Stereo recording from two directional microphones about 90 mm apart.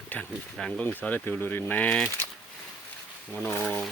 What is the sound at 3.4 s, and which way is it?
Speech, 25° left (ahead or behind).